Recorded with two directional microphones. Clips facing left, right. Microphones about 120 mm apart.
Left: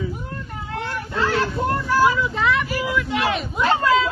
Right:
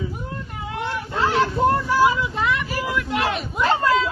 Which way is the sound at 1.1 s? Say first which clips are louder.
Right 1 dB; 25° right (ahead or behind).